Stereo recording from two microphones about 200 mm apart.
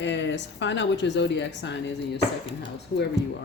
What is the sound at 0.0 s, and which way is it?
Speech, 65° left (ahead or behind).